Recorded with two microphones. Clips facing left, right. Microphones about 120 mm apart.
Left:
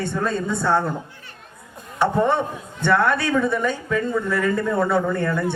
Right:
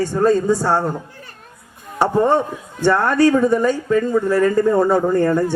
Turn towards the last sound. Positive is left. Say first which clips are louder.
# right 6 dB
turn(degrees=-40)  # may be behind; listen again after turning